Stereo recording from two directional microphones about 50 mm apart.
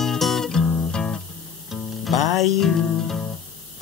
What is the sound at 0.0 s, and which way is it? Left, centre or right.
Music, centre.